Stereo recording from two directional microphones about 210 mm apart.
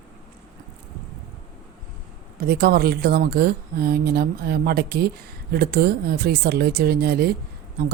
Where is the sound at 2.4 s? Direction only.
45° right (ahead or behind).